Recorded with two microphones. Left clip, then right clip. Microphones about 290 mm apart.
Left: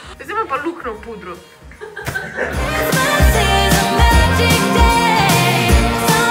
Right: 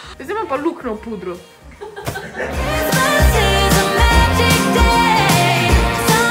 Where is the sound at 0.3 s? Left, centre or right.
Right.